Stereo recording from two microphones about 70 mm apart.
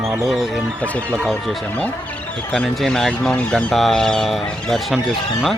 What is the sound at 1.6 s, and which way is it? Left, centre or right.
Speech, centre.